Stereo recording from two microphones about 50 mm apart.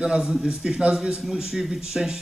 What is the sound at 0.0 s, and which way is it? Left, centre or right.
A man's voice, centre.